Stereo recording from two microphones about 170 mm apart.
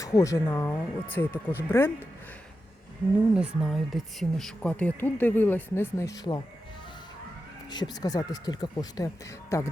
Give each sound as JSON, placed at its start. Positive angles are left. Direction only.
{"t": 0.0, "sound": "speech", "side_deg": 20}
{"t": 3.3, "sound": "speech", "side_deg": -5}
{"t": 7.7, "sound": "speech", "side_deg": 25}